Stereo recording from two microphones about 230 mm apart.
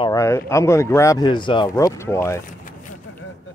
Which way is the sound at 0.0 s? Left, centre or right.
Centre.